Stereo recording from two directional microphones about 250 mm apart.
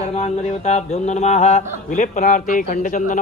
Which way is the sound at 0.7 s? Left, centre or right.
Left.